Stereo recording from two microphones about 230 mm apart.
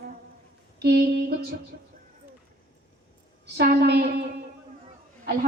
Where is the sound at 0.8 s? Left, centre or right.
Right.